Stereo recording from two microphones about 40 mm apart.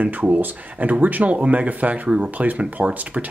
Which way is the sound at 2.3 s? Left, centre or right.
Right.